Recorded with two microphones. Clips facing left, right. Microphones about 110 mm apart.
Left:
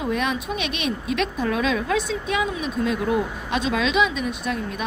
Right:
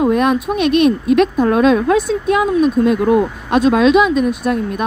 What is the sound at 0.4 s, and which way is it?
Speech, 50° right (ahead or behind).